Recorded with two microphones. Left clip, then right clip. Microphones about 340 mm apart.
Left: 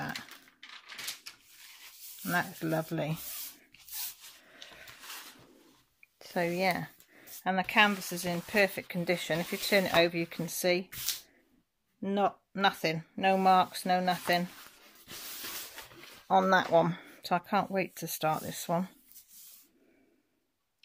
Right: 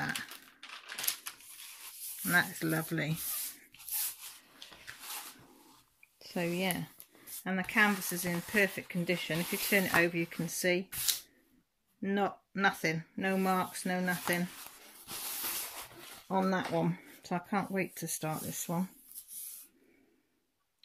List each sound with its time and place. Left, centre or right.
0.0 s a sound: centre
2.2 s speech: centre
6.1 s speech: left
7.2 s speech: centre
8.8 s speech: left
9.8 s speech: centre
12.0 s speech: centre
16.3 s speech: left
17.2 s speech: centre